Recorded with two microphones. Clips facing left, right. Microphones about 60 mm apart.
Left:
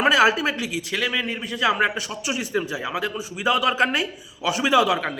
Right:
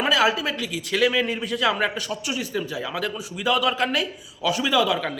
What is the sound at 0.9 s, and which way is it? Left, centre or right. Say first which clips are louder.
A man's voice: right 5 dB; centre.